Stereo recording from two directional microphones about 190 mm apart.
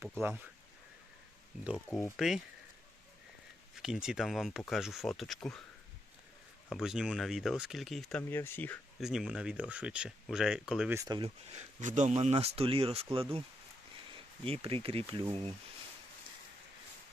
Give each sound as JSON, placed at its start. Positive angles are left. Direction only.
{"t": 0.2, "sound": "speech", "side_deg": -10}
{"t": 1.6, "sound": "speech", "side_deg": -5}
{"t": 3.8, "sound": "speech", "side_deg": -5}
{"t": 6.7, "sound": "speech", "side_deg": 0}
{"t": 9.0, "sound": "speech", "side_deg": 0}
{"t": 10.9, "sound": "speech", "side_deg": -20}
{"t": 14.4, "sound": "speech", "side_deg": -30}